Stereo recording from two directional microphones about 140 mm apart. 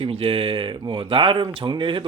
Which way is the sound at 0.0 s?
40° right (ahead or behind).